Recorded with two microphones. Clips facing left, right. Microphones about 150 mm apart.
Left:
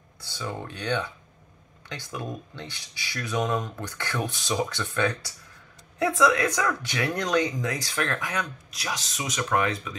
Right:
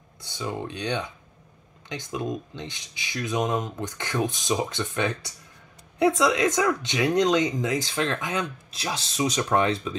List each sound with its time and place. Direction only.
0.2 s speech: 20° right (ahead or behind)